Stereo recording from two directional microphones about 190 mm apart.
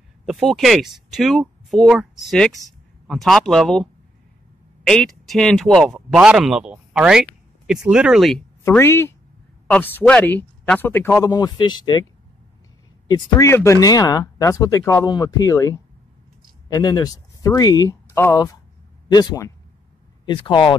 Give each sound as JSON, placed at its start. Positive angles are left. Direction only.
{"t": 0.2, "sound": "speech", "side_deg": 0}
{"t": 8.6, "sound": "speech", "side_deg": 15}
{"t": 13.1, "sound": "speech", "side_deg": 15}